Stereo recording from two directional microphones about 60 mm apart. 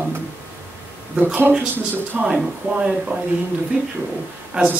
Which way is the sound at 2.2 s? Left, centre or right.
Centre.